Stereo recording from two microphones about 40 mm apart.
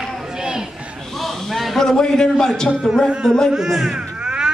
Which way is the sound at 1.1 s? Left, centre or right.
Centre.